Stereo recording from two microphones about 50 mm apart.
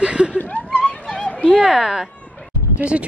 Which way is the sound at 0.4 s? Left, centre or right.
Left.